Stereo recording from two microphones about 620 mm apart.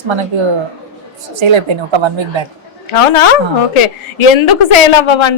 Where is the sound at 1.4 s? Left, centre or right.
Right.